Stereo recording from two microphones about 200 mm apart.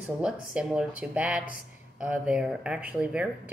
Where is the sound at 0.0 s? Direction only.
5° right (ahead or behind).